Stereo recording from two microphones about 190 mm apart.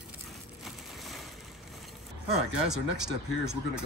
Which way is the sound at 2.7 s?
5° right (ahead or behind).